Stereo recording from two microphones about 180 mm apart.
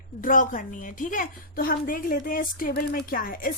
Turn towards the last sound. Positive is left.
turn(degrees=55)  # may be behind; listen again after turning